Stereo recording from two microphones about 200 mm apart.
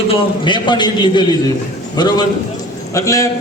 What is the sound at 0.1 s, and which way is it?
A man's voice, 25° left (ahead or behind).